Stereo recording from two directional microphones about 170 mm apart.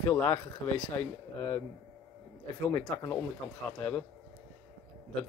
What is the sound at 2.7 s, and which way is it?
Speech, 15° left (ahead or behind).